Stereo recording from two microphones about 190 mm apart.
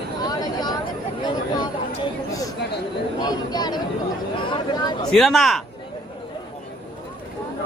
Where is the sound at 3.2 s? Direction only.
20° left (ahead or behind).